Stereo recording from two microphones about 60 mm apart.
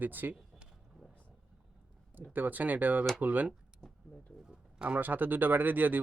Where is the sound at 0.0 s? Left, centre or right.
Right.